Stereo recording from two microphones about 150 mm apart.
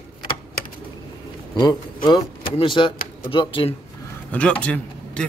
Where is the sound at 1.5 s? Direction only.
30° left (ahead or behind).